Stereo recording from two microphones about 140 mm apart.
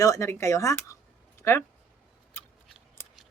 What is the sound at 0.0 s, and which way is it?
Speech, 20° left (ahead or behind).